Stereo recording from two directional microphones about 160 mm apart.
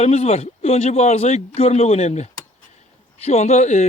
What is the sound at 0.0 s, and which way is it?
Speech, 45° left (ahead or behind).